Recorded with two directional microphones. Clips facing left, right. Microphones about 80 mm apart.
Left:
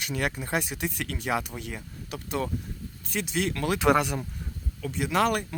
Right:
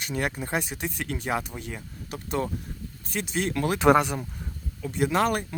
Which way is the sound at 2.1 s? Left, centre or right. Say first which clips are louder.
Right 1 dB; right.